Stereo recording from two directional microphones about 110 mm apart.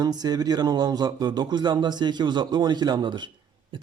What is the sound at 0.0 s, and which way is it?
A man's voice, 35° right (ahead or behind).